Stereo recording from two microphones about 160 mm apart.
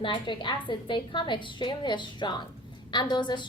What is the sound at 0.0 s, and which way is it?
A woman's voice, 30° left (ahead or behind).